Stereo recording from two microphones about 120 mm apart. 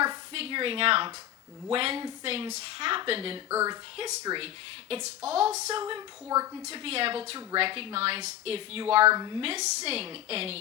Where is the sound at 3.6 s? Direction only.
35° right (ahead or behind).